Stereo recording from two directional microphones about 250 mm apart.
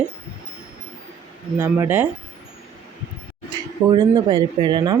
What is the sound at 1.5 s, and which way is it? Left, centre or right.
Speech, centre.